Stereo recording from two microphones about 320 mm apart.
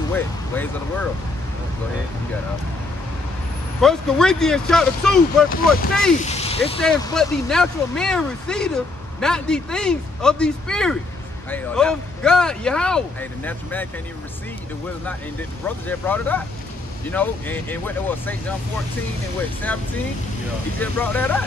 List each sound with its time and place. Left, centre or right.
0.1 s speech: centre
3.8 s speech: centre
5.5 s speech: left
6.8 s speech: centre
15.9 s speech: centre
19.7 s speech: centre